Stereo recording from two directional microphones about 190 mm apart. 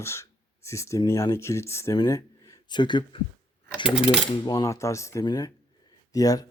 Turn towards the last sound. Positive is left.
turn(degrees=20)  # may be behind; listen again after turning